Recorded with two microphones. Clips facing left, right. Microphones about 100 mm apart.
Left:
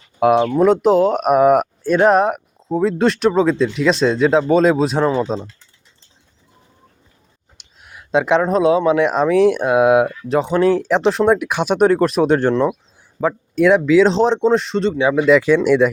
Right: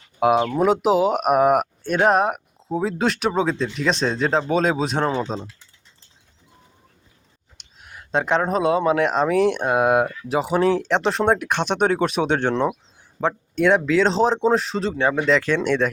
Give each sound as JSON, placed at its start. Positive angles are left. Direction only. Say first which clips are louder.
{"t": 0.2, "sound": "speech", "louder": "left 4 dB", "side_deg": 0}
{"t": 7.6, "sound": "speech", "louder": "left 1 dB", "side_deg": 5}